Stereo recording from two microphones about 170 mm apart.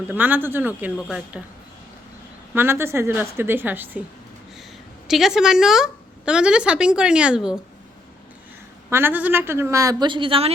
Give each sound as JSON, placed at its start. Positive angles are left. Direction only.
{"t": 0.1, "sound": "a woman's voice", "side_deg": -10}
{"t": 2.6, "sound": "a woman's voice", "side_deg": -15}
{"t": 5.0, "sound": "a woman's voice", "side_deg": 0}
{"t": 8.9, "sound": "a woman's voice", "side_deg": -15}